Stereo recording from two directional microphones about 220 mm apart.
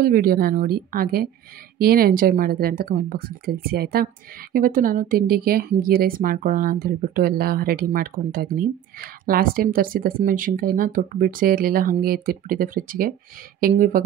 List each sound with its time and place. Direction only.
0.0 s a woman's voice: 40° right (ahead or behind)